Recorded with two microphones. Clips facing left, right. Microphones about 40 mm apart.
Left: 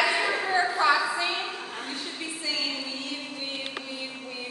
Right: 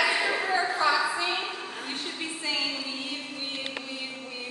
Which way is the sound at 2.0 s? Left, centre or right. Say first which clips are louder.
Right 1 dB; right.